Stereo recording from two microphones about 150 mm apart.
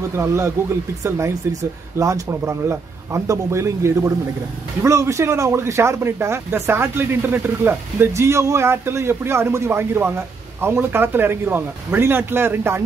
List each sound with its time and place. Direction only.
0.1 s speech: 20° right (ahead or behind)